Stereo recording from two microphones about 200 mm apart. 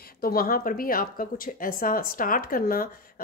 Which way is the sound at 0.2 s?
45° left (ahead or behind).